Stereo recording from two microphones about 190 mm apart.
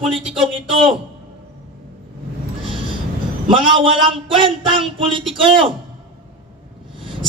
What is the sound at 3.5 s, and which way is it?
Speech, 25° right (ahead or behind).